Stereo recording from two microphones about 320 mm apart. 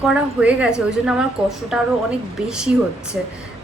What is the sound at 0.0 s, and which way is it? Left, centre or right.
A woman's voice, centre.